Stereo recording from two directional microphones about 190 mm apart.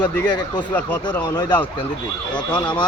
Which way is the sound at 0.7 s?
10° left (ahead or behind).